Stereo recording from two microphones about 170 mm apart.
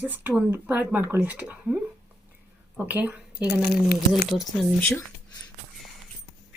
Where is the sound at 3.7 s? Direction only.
70° left (ahead or behind).